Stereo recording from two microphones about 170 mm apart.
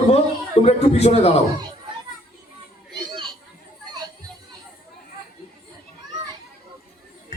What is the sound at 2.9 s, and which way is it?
Children playing, 30° right (ahead or behind).